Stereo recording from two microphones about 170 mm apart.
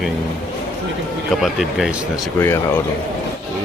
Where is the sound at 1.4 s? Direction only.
Centre (ahead or behind).